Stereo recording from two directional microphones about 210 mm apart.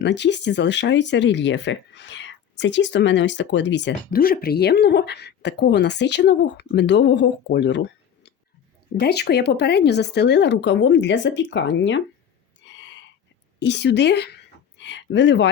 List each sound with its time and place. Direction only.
0.0 s speech: 55° left (ahead or behind)
12.6 s a sound: 60° left (ahead or behind)
13.6 s a woman's voice: 55° left (ahead or behind)